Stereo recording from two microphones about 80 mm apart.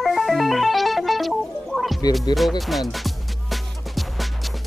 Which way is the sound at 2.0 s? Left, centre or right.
Left.